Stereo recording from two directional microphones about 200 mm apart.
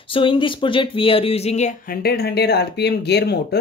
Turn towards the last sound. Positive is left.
turn(degrees=55)  # may be behind; listen again after turning